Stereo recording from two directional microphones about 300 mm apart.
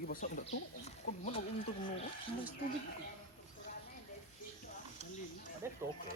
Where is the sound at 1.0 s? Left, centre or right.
Left.